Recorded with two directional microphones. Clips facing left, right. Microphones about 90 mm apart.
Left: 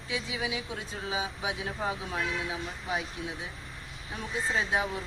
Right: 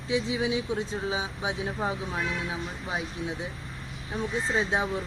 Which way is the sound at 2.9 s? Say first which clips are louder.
Right 1 dB; 25° right (ahead or behind).